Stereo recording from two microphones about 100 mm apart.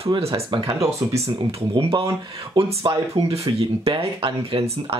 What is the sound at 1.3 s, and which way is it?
Speech, 50° right (ahead or behind).